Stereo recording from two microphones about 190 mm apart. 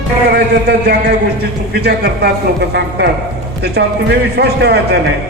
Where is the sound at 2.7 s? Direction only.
60° right (ahead or behind).